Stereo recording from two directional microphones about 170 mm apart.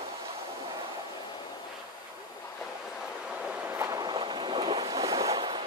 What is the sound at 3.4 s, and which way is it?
Boat, 15° right (ahead or behind).